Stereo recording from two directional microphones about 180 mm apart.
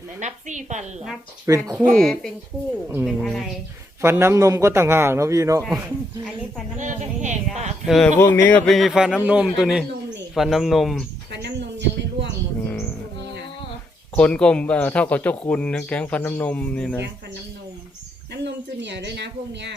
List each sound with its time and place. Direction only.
0.2 s speech: 40° right (ahead or behind)
1.5 s a man's voice: 15° right (ahead or behind)
2.0 s a man's voice: centre (ahead or behind)
4.0 s a man's voice: 15° right (ahead or behind)
6.7 s speech: 45° right (ahead or behind)
7.9 s a man's voice: centre (ahead or behind)
8.2 s a man's voice: 10° left (ahead or behind)
11.4 s a sound: 75° right (ahead or behind)
12.6 s music: 15° left (ahead or behind)
14.2 s speech: 5° left (ahead or behind)
18.3 s speech: 75° right (ahead or behind)